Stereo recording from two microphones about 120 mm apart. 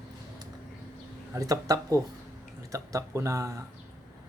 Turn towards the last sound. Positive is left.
turn(degrees=-25)  # may be behind; listen again after turning